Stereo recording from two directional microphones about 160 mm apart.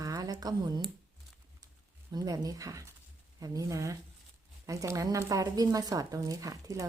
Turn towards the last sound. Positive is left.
turn(degrees=-20)  # may be behind; listen again after turning